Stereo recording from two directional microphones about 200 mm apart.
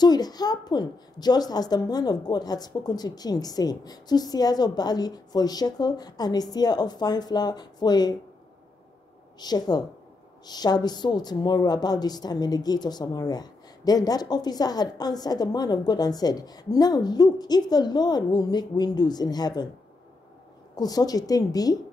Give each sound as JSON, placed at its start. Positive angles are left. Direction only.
{"t": 0.0, "sound": "a woman's voice", "side_deg": 20}
{"t": 9.4, "sound": "a woman's voice", "side_deg": 20}
{"t": 20.7, "sound": "a woman's voice", "side_deg": 20}